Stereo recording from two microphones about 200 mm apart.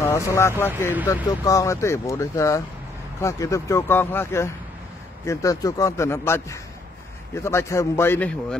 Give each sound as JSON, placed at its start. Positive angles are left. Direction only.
{"t": 0.0, "sound": "speech", "side_deg": 15}